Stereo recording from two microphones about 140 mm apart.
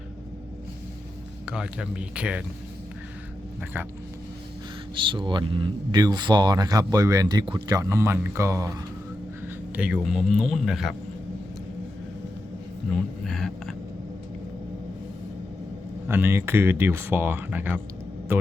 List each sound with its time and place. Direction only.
1.5 s speech: 5° right (ahead or behind)
3.6 s speech: 15° right (ahead or behind)
4.9 s speech: 35° right (ahead or behind)
9.7 s speech: 10° right (ahead or behind)
13.2 s speech: centre (ahead or behind)
16.0 s a man's voice: 15° right (ahead or behind)